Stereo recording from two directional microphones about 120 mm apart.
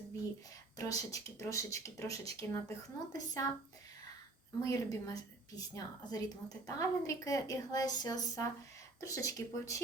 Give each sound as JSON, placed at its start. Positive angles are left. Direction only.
{"t": 0.8, "sound": "speech", "side_deg": 30}
{"t": 4.6, "sound": "a woman's voice", "side_deg": 30}